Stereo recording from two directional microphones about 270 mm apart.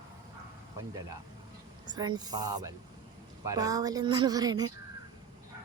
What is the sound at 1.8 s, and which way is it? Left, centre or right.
A woman's voice, centre.